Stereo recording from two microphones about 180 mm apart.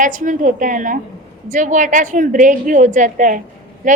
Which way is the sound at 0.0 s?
45° right (ahead or behind).